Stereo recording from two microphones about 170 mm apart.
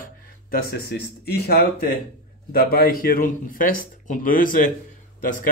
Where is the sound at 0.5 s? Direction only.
65° left (ahead or behind).